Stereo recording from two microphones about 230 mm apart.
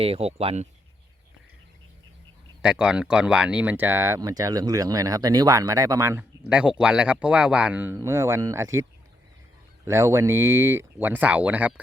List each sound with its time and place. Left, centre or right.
0.0 s speech: right
2.6 s speech: centre
9.8 s speech: centre